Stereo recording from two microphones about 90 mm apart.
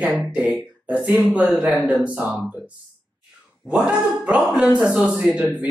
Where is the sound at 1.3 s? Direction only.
15° right (ahead or behind).